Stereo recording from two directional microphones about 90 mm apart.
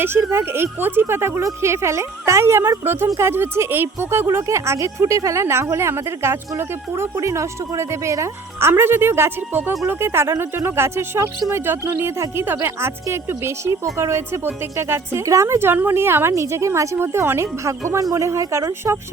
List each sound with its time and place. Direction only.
0.0 s speech: 25° right (ahead or behind)